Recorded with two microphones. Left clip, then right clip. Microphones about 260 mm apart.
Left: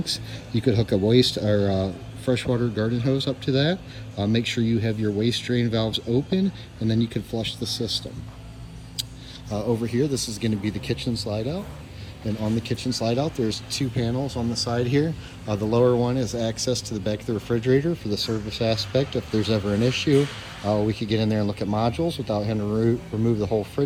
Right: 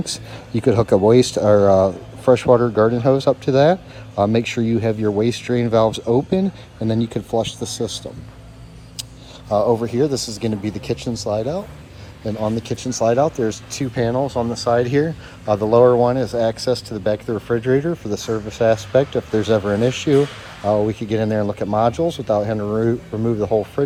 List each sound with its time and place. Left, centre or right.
0.0 s speech: centre
9.5 s speech: centre
10.0 s speech: centre
10.4 s speech: centre
12.5 s speech: centre
12.9 s speech: centre